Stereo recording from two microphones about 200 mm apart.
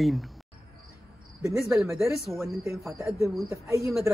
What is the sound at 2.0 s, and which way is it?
Speech, centre (ahead or behind).